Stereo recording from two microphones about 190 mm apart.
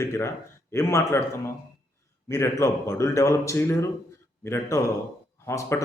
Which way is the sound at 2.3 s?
15° left (ahead or behind).